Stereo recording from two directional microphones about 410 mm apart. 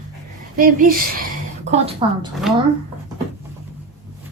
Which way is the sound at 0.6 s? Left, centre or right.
Centre.